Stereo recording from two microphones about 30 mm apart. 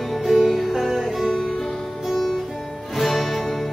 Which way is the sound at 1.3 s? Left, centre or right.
Centre.